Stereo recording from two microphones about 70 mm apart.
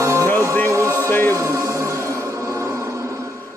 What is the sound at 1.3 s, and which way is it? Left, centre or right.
Music, right.